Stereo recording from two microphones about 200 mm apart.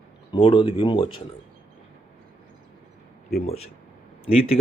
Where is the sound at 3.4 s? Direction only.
30° left (ahead or behind).